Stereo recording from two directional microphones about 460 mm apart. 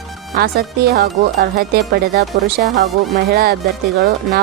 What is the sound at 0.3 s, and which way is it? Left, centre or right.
Speech, centre.